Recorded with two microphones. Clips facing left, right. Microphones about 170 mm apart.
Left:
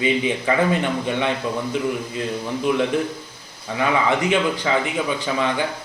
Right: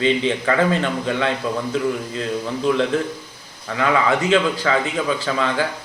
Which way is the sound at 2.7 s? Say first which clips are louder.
Right 1 dB; 20° left (ahead or behind).